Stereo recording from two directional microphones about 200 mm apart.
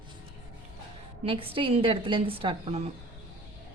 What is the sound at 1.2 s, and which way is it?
A woman's voice, 25° right (ahead or behind).